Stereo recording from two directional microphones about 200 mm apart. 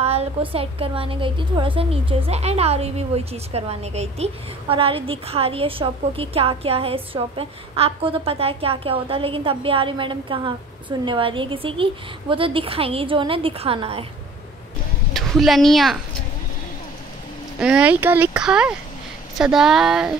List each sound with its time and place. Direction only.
0.0 s a woman's voice: 30° right (ahead or behind)
15.1 s a woman's voice: centre (ahead or behind)
17.6 s speech: 5° right (ahead or behind)